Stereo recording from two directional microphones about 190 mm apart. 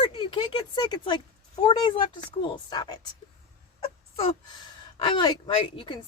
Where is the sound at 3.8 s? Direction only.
30° left (ahead or behind).